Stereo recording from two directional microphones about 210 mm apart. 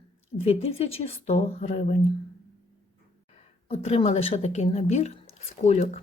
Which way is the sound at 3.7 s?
30° left (ahead or behind).